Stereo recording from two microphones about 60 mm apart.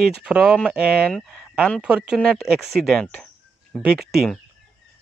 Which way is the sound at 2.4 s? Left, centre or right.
Centre.